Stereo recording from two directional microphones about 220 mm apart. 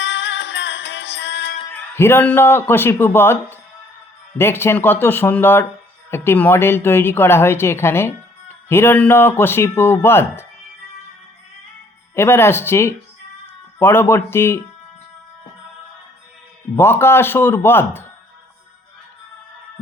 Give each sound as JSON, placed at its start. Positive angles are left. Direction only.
{"t": 0.0, "sound": "music", "side_deg": 55}
{"t": 1.7, "sound": "a man's voice", "side_deg": 10}
{"t": 12.1, "sound": "a woman's voice", "side_deg": 10}
{"t": 16.7, "sound": "a woman's voice", "side_deg": 10}